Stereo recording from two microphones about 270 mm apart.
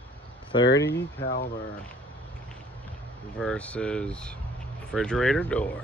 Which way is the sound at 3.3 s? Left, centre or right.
Centre.